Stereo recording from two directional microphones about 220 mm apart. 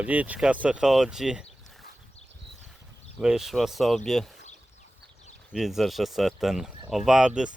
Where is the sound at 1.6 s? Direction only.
Centre (ahead or behind).